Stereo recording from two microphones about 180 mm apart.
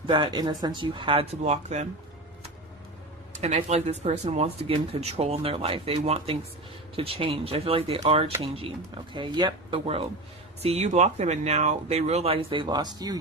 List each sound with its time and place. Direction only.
0.1 s speech: 25° right (ahead or behind)
3.4 s speech: 40° right (ahead or behind); by 13.1 s 20° right (ahead or behind)